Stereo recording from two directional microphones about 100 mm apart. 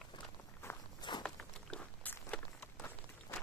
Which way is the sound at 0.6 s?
25° left (ahead or behind).